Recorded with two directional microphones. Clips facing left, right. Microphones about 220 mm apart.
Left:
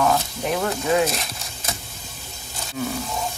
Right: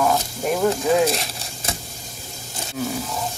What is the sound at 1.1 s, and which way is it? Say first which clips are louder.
Horse: right 4 dB; 30° right (ahead or behind).